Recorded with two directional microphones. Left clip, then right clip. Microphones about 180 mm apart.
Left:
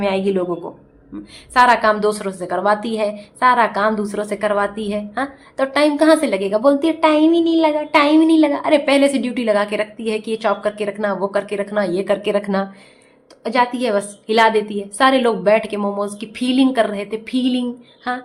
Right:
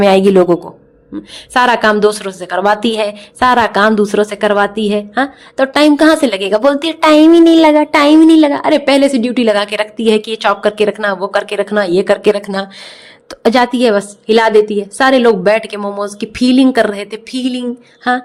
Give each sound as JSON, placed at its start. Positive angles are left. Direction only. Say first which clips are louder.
{"t": 0.0, "sound": "a woman's voice", "louder": "right 11 dB", "side_deg": -50}